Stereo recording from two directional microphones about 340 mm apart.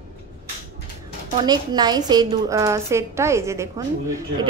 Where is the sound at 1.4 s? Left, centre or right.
Centre.